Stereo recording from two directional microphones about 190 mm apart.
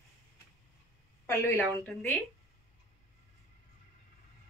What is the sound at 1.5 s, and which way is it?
Speech, 5° left (ahead or behind).